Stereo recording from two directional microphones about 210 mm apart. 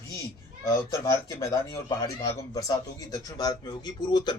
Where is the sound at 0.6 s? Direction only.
15° left (ahead or behind).